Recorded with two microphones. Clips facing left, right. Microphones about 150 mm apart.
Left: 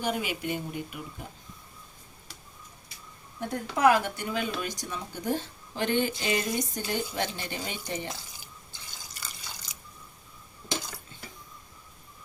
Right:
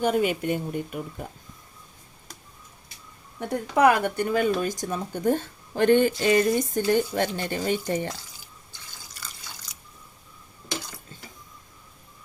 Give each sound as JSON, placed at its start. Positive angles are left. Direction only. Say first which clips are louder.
{"t": 0.0, "sound": "speech", "louder": "right 8 dB", "side_deg": -50}
{"t": 3.5, "sound": "speech", "louder": "right 3 dB", "side_deg": -65}